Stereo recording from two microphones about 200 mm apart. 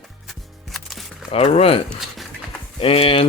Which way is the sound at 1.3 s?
30° left (ahead or behind).